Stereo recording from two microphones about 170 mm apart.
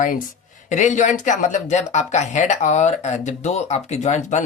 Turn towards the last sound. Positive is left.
turn(degrees=45)  # may be behind; listen again after turning